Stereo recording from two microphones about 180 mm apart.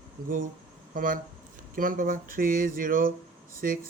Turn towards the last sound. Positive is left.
turn(degrees=-50)  # may be behind; listen again after turning